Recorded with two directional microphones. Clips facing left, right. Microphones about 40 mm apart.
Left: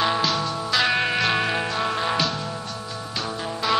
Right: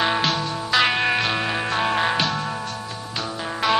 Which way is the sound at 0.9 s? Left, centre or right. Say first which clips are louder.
Right 2 dB; right.